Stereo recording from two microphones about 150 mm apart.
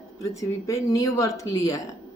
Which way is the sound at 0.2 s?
20° left (ahead or behind).